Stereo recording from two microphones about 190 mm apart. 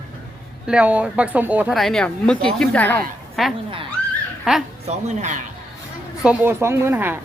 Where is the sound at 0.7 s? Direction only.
5° right (ahead or behind).